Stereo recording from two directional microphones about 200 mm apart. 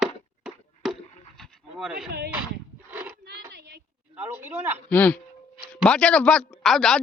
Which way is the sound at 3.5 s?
55° right (ahead or behind).